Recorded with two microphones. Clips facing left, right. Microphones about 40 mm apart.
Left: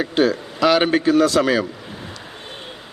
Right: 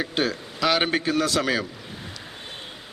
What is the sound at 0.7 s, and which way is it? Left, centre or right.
Speech, centre.